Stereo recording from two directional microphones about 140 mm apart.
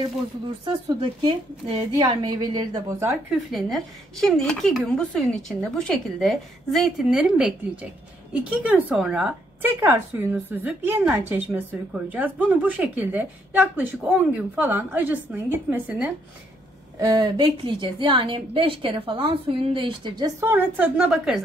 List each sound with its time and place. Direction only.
0.7 s a woman's voice: 35° right (ahead or behind); by 3.2 s 20° right (ahead or behind)
3.5 s speech: centre (ahead or behind)
9.8 s a woman's voice: 15° right (ahead or behind)
17.0 s a woman's voice: 30° right (ahead or behind)
20.4 s a woman's voice: 15° right (ahead or behind)